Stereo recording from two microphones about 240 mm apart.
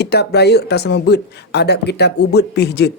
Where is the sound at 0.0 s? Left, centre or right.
Left.